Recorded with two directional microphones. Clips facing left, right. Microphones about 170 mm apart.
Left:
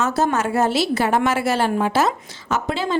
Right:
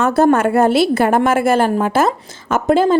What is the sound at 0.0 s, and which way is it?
A woman's voice, 55° right (ahead or behind).